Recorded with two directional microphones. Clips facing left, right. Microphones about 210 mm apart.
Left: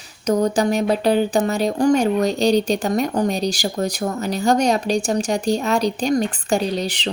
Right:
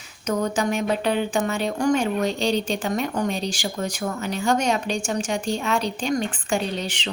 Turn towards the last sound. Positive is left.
turn(degrees=35)  # may be behind; listen again after turning